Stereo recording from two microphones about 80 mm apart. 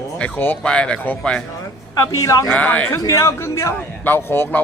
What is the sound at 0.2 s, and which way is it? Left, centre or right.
Speech, left.